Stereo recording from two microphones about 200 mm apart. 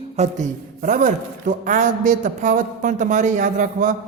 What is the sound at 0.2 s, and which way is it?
A man's voice, 40° right (ahead or behind).